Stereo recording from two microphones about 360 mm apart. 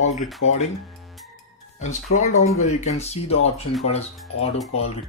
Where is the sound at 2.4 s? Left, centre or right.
Centre.